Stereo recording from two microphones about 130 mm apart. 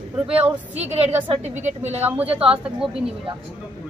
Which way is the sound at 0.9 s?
50° right (ahead or behind).